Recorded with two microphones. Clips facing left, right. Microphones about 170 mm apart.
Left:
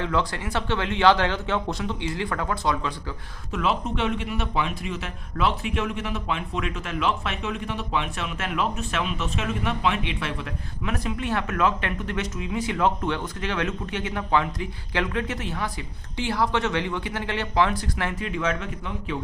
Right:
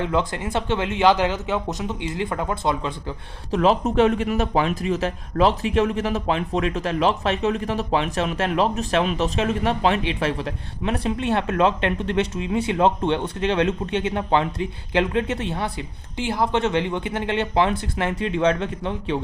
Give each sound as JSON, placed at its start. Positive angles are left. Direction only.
{"t": 0.0, "sound": "speech", "side_deg": -20}
{"t": 3.5, "sound": "speech", "side_deg": -35}